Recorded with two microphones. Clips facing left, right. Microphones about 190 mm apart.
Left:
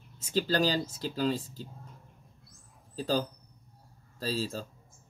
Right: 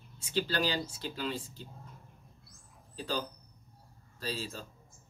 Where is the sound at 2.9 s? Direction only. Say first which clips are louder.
Left 6 dB; 40° left (ahead or behind).